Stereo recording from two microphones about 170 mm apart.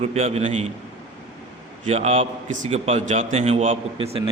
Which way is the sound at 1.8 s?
35° right (ahead or behind).